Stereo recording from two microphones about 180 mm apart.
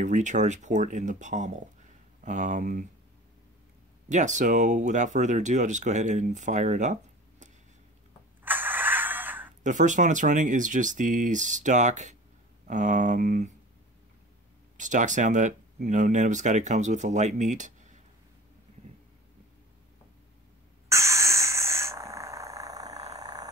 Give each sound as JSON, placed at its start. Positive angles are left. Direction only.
{"t": 0.0, "sound": "speech", "side_deg": -45}
{"t": 4.1, "sound": "speech", "side_deg": -45}
{"t": 8.5, "sound": "a sound", "side_deg": -10}
{"t": 9.6, "sound": "speech", "side_deg": -45}
{"t": 14.8, "sound": "speech", "side_deg": -45}
{"t": 20.9, "sound": "a sound", "side_deg": -15}